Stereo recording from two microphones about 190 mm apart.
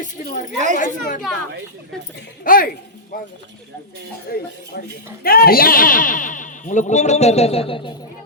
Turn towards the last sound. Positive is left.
turn(degrees=25)  # may be behind; listen again after turning